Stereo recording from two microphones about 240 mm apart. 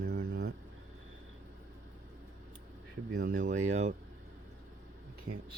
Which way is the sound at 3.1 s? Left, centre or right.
Right.